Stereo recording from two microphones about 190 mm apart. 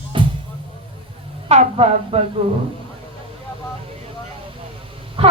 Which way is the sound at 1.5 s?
35° right (ahead or behind).